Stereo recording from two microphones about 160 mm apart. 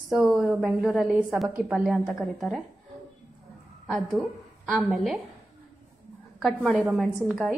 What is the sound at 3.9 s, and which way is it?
A woman's voice, centre (ahead or behind).